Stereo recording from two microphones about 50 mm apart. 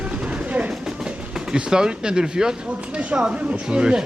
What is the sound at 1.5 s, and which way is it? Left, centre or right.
Speech, centre.